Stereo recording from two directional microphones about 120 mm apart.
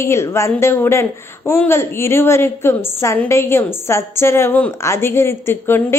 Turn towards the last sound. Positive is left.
turn(degrees=20)  # may be behind; listen again after turning